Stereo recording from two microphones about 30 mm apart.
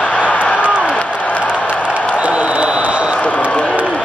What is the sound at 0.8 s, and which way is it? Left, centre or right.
Applause, left.